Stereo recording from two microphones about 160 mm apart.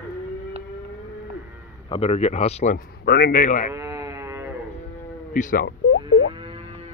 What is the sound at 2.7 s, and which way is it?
Speech, 85° left.